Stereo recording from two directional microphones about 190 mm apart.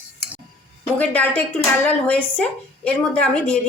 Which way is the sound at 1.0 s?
10° left (ahead or behind).